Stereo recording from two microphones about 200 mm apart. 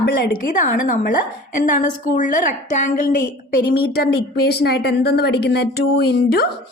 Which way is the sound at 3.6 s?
50° left (ahead or behind).